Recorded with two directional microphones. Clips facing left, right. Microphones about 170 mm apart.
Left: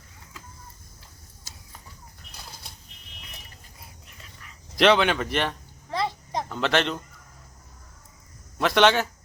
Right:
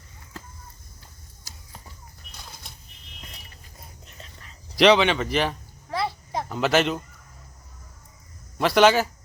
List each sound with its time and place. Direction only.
4.2 s dog: 30° right (ahead or behind)
4.8 s a sound: centre (ahead or behind)
8.5 s a man's voice: centre (ahead or behind)